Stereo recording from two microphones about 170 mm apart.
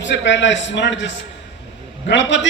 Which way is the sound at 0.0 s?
90° left.